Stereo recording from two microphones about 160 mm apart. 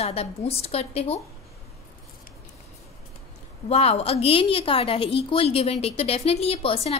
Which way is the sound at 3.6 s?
40° left (ahead or behind).